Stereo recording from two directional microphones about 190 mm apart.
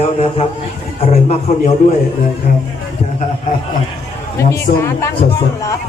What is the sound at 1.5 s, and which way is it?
Music, 40° left (ahead or behind).